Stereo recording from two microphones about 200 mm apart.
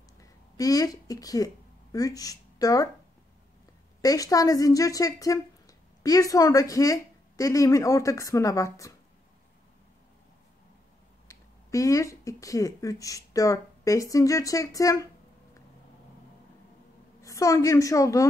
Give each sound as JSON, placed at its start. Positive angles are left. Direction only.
{"t": 0.2, "sound": "speech", "side_deg": 15}
{"t": 4.0, "sound": "a woman's voice", "side_deg": 15}
{"t": 11.2, "sound": "speech", "side_deg": 15}
{"t": 17.2, "sound": "a woman's voice", "side_deg": 15}